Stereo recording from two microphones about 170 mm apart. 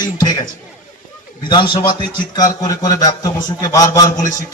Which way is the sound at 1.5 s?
25° left (ahead or behind).